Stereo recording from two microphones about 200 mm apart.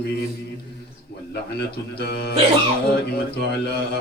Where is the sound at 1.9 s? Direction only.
50° left (ahead or behind).